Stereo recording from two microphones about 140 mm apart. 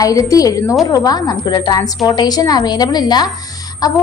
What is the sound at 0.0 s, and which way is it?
A woman's voice, 25° left (ahead or behind).